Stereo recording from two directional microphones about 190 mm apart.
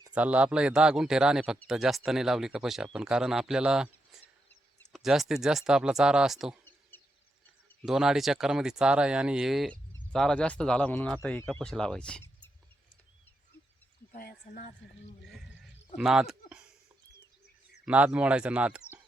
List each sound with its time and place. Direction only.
0.1 s speech: 5° right (ahead or behind)
6.9 s a sound: 10° left (ahead or behind)
7.9 s speech: 5° right (ahead or behind)
14.2 s speech: 50° left (ahead or behind)
16.0 s speech: 5° right (ahead or behind)
17.8 s speech: 5° right (ahead or behind)